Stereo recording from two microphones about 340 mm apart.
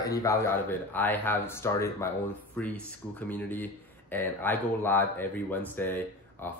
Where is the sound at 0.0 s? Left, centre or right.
Centre.